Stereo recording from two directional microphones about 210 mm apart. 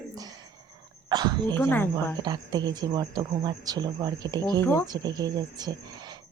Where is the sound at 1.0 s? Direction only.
20° right (ahead or behind).